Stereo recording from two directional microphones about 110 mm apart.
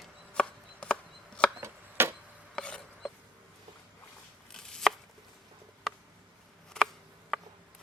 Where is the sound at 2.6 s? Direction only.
10° left (ahead or behind).